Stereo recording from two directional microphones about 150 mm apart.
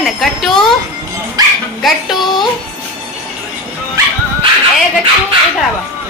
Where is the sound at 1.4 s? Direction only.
25° right (ahead or behind).